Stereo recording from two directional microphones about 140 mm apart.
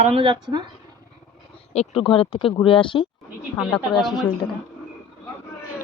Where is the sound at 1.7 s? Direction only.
45° left (ahead or behind).